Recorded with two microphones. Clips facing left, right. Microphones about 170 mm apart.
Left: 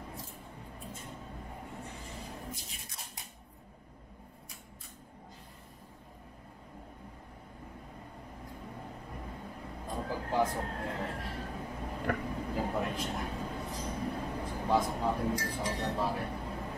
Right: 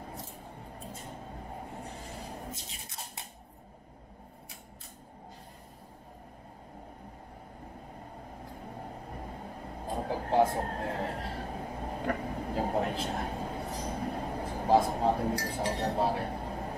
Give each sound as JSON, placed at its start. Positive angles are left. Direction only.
{"t": 0.7, "sound": "music", "side_deg": -40}
{"t": 1.7, "sound": "vehicle", "side_deg": -40}
{"t": 8.6, "sound": "vehicle", "side_deg": -35}